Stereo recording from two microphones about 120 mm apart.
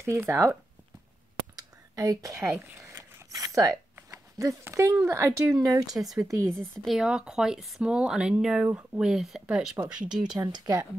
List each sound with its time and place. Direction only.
0.0 s speech: 25° right (ahead or behind)
1.6 s zipper: 30° right (ahead or behind)
3.9 s a sound: 25° right (ahead or behind)
4.9 s speech: 20° right (ahead or behind)
5.9 s speech: centre (ahead or behind)
10.5 s speech: 30° right (ahead or behind)